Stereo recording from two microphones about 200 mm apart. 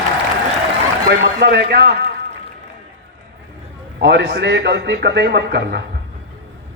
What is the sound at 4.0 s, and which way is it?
A man's voice, 60° right (ahead or behind).